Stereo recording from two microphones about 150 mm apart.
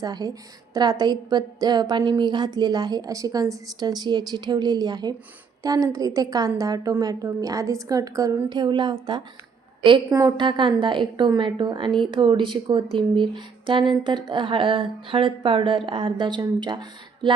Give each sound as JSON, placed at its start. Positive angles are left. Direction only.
{"t": 0.0, "sound": "a woman's voice", "side_deg": -25}